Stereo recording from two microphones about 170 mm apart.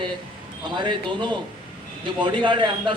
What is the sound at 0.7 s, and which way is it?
A man's voice, 25° right (ahead or behind).